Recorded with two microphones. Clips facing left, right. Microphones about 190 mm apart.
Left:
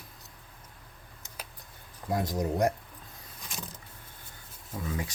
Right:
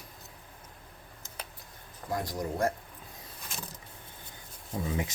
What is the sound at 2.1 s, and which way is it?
Speech, 20° left (ahead or behind).